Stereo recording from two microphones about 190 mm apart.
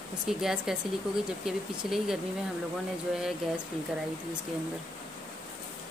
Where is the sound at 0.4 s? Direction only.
5° right (ahead or behind).